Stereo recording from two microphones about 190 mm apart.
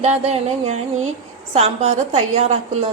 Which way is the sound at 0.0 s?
35° right (ahead or behind).